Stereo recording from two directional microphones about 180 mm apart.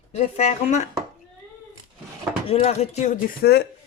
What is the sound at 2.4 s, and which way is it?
Speech, 35° left (ahead or behind).